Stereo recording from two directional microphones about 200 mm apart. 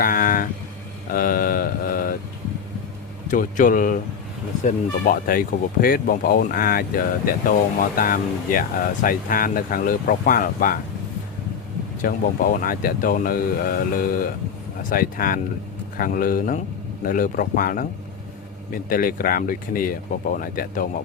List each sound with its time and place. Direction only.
0.0 s vehicle: 45° left (ahead or behind)
1.1 s mantra: 45° left (ahead or behind)
3.2 s speech: 40° left (ahead or behind)
12.0 s speech: 45° left (ahead or behind)
18.9 s speech: 45° left (ahead or behind)